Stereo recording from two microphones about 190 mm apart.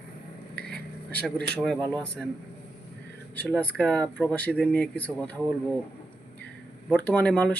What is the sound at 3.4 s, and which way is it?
Speech, 5° left (ahead or behind).